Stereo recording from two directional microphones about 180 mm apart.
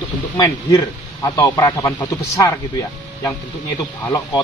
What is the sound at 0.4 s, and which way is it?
Speech, 20° left (ahead or behind).